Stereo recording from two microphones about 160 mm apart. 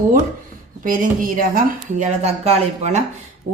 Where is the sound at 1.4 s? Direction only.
55° right (ahead or behind).